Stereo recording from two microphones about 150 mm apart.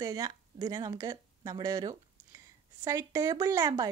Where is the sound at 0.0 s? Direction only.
25° right (ahead or behind).